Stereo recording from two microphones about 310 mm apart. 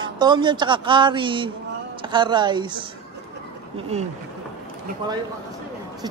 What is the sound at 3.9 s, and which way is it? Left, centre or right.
Speech, right.